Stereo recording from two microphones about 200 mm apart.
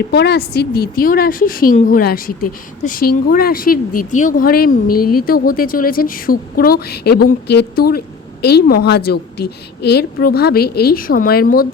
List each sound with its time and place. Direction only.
0.1 s a woman's voice: 55° left (ahead or behind)